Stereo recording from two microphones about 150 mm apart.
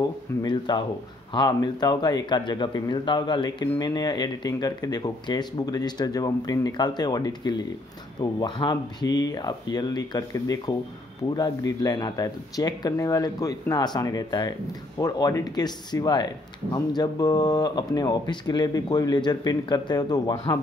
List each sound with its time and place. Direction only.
0.4 s speech: 30° left (ahead or behind)